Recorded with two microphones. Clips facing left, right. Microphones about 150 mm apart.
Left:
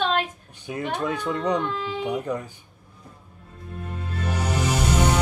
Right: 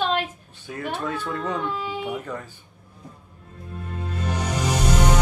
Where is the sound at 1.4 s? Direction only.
5° right (ahead or behind).